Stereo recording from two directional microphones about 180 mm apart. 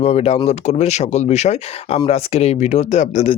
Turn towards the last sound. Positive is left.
turn(degrees=40)  # may be behind; listen again after turning